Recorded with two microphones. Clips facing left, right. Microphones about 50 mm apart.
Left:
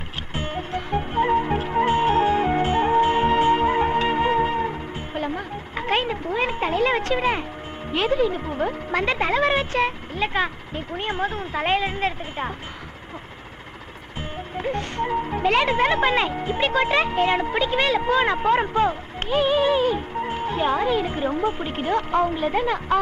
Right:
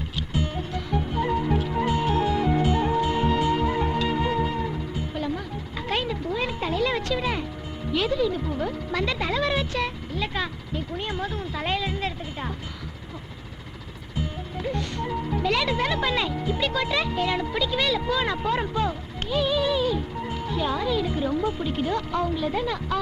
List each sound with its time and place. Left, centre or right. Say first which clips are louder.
0.3 s music: left 2 dB; left
7.9 s speech: left 3 dB; left
14.2 s speech: left 1 dB; left